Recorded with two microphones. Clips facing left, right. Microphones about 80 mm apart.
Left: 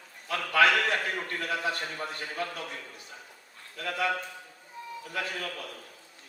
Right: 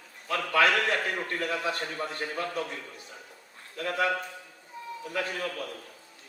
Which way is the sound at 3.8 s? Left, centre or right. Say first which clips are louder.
Right 3 dB; right.